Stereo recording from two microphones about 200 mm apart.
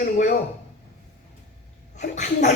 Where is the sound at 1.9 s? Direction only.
40° left (ahead or behind).